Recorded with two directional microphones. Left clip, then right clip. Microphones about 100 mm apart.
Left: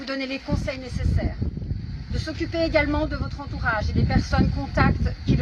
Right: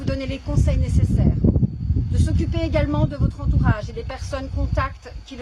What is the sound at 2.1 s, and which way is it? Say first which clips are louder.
Speech: left 2 dB; 25° right (ahead or behind).